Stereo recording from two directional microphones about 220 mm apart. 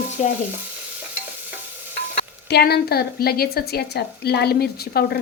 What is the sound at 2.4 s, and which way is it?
A woman's voice, 45° left (ahead or behind).